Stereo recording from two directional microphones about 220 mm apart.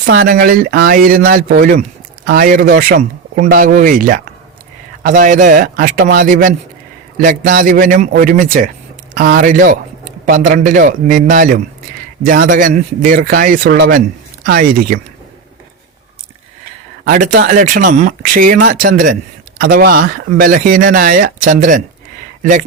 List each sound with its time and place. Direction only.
0.0 s a man's voice: 45° right (ahead or behind)
17.5 s a man's voice: 35° right (ahead or behind)